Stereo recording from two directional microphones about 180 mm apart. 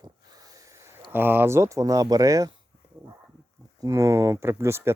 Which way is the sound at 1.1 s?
10° right (ahead or behind).